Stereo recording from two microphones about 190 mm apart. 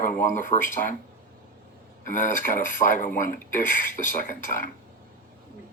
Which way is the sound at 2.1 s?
45° left (ahead or behind).